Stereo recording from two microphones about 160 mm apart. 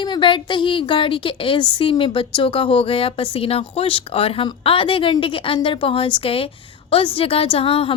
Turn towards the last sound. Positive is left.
turn(degrees=35)  # may be behind; listen again after turning